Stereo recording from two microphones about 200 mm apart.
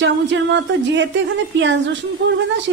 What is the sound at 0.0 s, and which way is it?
Speech, 65° right (ahead or behind).